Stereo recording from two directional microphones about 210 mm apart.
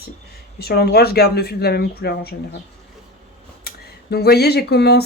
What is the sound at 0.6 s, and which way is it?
Speech, 50° left (ahead or behind).